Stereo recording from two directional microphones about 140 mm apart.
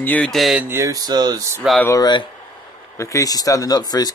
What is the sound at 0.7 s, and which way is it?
Speech, 20° right (ahead or behind).